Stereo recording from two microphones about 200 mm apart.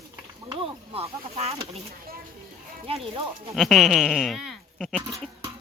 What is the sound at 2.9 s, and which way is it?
Speech, 30° right (ahead or behind).